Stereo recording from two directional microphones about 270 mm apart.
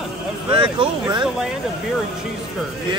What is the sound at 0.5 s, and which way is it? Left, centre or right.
Speech, centre.